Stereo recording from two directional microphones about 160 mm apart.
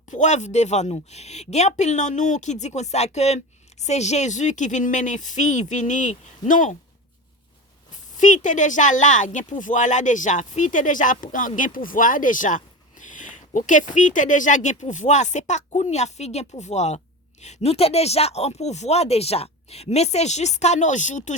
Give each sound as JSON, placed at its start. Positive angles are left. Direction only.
{"t": 0.1, "sound": "speech", "side_deg": 50}
{"t": 8.1, "sound": "speech", "side_deg": 50}